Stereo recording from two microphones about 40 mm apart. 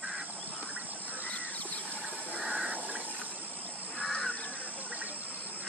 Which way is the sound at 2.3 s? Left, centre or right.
Right.